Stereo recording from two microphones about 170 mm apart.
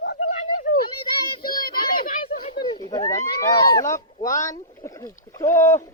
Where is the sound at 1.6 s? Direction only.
60° left (ahead or behind).